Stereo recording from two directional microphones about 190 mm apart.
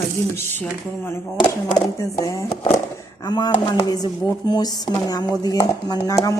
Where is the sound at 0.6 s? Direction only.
10° left (ahead or behind).